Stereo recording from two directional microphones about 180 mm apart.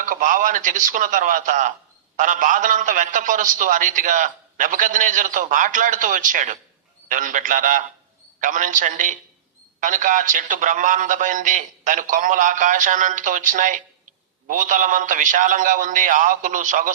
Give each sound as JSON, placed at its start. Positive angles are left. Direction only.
{"t": 0.0, "sound": "a man's voice", "side_deg": -45}